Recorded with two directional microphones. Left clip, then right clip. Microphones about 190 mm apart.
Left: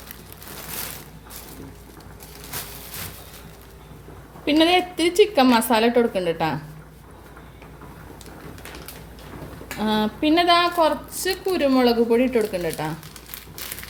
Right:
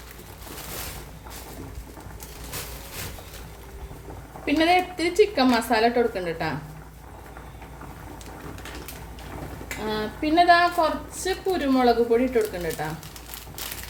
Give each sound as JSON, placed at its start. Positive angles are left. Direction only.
{"t": 4.4, "sound": "a woman's voice", "side_deg": 40}
{"t": 9.8, "sound": "a woman's voice", "side_deg": 45}